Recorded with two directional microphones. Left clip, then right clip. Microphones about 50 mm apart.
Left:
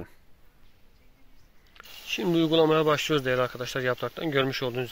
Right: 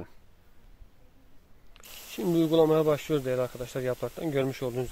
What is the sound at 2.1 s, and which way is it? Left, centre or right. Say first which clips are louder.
Speech: left 2 dB; centre.